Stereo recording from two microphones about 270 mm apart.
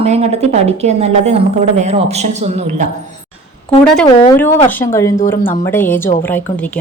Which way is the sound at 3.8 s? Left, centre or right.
Centre.